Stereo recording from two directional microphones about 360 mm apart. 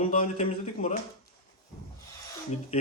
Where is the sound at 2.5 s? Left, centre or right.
Centre.